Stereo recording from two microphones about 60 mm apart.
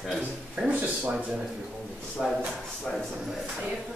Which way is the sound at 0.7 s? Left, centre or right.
Right.